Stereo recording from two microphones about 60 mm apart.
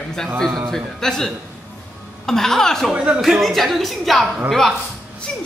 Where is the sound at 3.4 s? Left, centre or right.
Centre.